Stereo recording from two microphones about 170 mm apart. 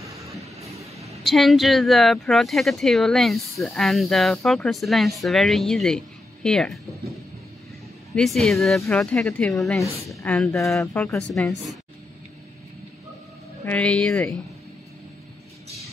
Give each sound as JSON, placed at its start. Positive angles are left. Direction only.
{"t": 0.0, "sound": "train", "side_deg": -20}
{"t": 0.4, "sound": "train", "side_deg": -40}
{"t": 1.2, "sound": "speech", "side_deg": 0}
{"t": 8.1, "sound": "a woman's voice", "side_deg": 0}
{"t": 13.7, "sound": "a woman's voice", "side_deg": 5}